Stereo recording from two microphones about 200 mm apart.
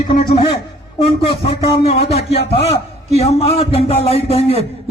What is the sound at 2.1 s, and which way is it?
A man's voice, 30° left (ahead or behind).